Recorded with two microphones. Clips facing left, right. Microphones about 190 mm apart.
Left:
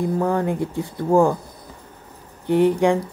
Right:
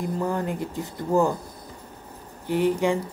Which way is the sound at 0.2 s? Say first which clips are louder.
Left 4 dB; 65° left (ahead or behind).